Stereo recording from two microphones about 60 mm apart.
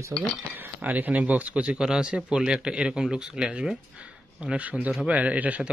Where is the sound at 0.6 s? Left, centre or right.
Right.